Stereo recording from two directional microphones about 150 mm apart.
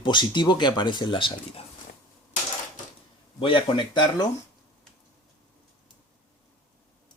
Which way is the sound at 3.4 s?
35° left (ahead or behind).